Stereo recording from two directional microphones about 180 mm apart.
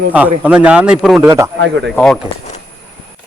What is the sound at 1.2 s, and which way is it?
Speech, 15° right (ahead or behind).